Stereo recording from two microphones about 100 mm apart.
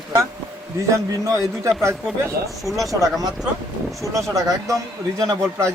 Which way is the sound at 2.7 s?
Centre (ahead or behind).